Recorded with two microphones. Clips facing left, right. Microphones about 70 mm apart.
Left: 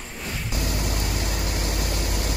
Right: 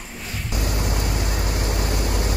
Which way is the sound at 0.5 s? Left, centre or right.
Centre.